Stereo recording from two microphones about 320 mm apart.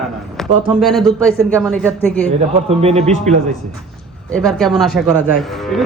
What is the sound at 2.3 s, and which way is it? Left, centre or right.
A man's voice, centre.